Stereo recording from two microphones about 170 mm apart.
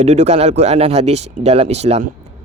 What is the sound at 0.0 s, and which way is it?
Speech, 40° right (ahead or behind).